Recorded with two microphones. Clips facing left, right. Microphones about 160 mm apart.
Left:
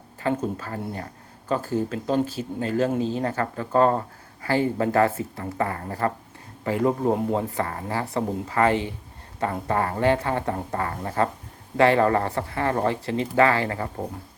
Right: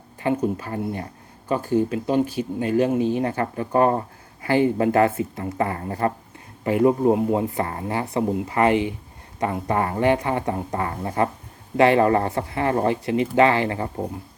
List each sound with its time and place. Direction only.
0.2 s speech: 15° right (ahead or behind)